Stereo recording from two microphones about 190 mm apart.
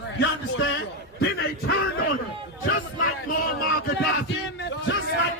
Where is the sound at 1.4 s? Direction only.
55° left (ahead or behind).